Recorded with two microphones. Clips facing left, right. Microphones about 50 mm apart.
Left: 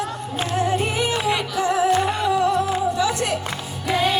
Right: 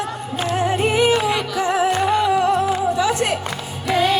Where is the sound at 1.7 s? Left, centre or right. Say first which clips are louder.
Even; right.